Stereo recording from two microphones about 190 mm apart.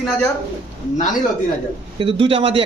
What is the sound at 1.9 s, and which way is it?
Speech, 25° right (ahead or behind).